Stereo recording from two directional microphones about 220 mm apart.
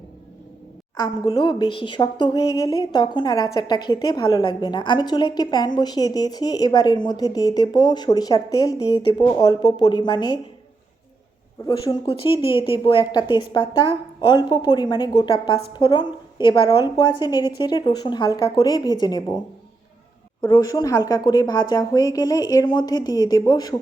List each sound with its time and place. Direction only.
0.9 s speech: 15° left (ahead or behind)
12.0 s a woman's voice: 25° left (ahead or behind)
20.5 s a woman's voice: 20° left (ahead or behind)